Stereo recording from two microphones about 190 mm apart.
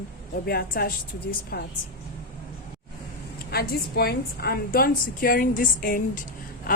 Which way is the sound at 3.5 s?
55° left (ahead or behind).